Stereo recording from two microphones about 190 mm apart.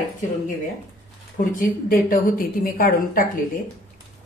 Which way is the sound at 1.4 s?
45° left (ahead or behind).